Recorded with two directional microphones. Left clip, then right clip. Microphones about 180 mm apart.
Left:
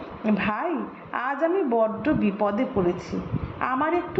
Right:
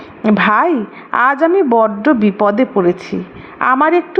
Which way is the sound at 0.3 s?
40° right (ahead or behind).